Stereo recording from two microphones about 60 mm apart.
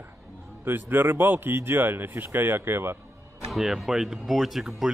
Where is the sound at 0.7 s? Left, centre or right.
Right.